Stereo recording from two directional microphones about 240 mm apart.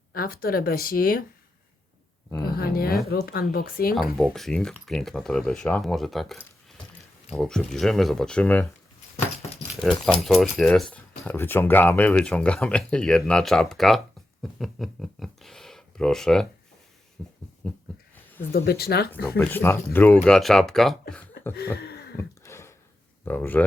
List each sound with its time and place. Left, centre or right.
0.1 s speech: left
2.4 s speech: left
4.2 s speech: centre
10.1 s speech: centre
17.2 s a sound: centre
17.6 s speech: centre
18.5 s speech: left
19.4 s speech: centre
21.8 s a sound: left
22.2 s a sound: centre
23.2 s speech: centre